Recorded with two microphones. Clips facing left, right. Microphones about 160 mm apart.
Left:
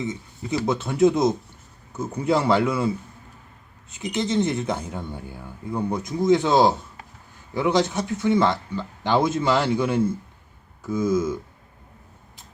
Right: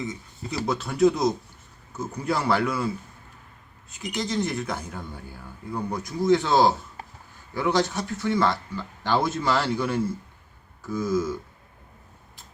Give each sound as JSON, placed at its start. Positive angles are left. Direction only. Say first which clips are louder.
{"t": 0.6, "sound": "speech", "louder": "left 1 dB", "side_deg": 20}